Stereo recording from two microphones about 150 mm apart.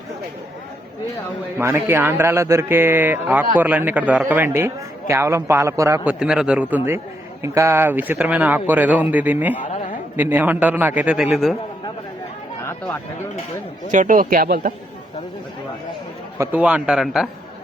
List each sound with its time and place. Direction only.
1.5 s speech: 15° right (ahead or behind)
6.1 s speech: 5° right (ahead or behind)
9.6 s a man's voice: 55° left (ahead or behind)
10.2 s speech: 15° right (ahead or behind)
13.9 s a man's voice: 60° right (ahead or behind); by 14.7 s 80° right
16.4 s speech: 10° right (ahead or behind)